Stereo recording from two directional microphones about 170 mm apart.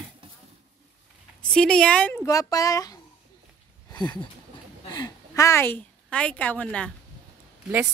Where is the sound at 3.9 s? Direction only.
25° left (ahead or behind).